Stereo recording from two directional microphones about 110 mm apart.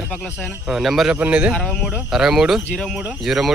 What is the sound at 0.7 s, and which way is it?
Speech, centre (ahead or behind).